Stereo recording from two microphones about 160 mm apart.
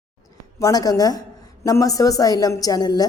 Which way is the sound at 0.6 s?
25° left (ahead or behind).